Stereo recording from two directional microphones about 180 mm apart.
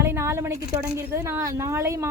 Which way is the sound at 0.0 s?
15° right (ahead or behind).